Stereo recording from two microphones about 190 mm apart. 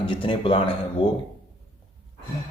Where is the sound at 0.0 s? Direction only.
25° left (ahead or behind).